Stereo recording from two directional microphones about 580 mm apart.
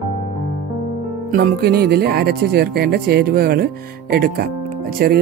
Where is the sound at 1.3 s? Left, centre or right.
Centre.